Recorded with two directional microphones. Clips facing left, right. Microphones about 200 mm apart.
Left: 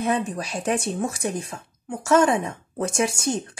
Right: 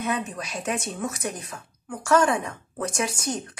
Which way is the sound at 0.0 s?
30° left (ahead or behind).